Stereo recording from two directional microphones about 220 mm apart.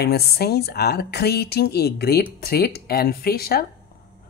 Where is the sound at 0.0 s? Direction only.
45° left (ahead or behind).